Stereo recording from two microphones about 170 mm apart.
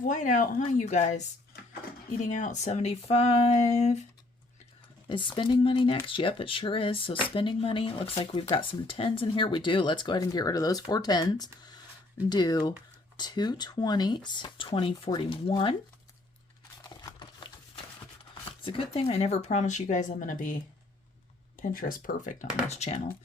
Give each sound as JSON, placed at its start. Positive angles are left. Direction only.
{"t": 0.0, "sound": "speech", "side_deg": 50}
{"t": 2.2, "sound": "speech", "side_deg": 45}
{"t": 5.0, "sound": "speech", "side_deg": 30}
{"t": 16.9, "sound": "horse", "side_deg": 25}
{"t": 18.6, "sound": "speech", "side_deg": 35}
{"t": 22.7, "sound": "speech", "side_deg": 40}